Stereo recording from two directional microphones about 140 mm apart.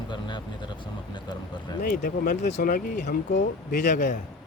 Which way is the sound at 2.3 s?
65° left (ahead or behind).